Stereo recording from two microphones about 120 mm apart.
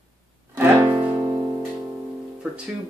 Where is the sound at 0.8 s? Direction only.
40° right (ahead or behind).